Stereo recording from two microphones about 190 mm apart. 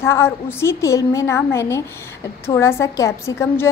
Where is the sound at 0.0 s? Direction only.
15° left (ahead or behind).